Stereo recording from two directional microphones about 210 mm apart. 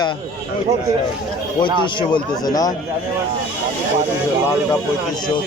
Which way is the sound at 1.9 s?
20° left (ahead or behind).